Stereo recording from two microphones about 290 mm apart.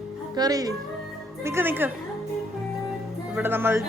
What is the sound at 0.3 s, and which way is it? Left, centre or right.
A woman's voice, centre.